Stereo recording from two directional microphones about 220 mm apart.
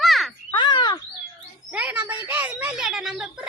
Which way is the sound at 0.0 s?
Centre (ahead or behind).